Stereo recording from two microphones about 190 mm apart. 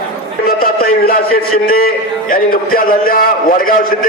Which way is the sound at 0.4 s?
50° left (ahead or behind).